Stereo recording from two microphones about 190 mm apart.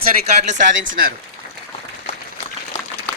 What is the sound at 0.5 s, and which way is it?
Speech, 45° right (ahead or behind).